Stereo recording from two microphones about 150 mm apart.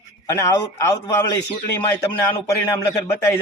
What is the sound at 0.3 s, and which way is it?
Speech, 20° left (ahead or behind).